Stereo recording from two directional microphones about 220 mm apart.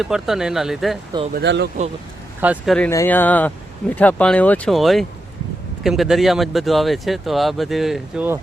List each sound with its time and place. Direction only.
0.0 s speech: centre (ahead or behind)
1.3 s speech: 50° right (ahead or behind)
2.4 s speech: 5° right (ahead or behind)
2.7 s speech: 10° left (ahead or behind)